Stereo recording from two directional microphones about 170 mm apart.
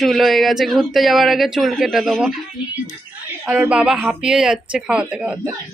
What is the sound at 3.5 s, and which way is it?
Speech, 5° right (ahead or behind).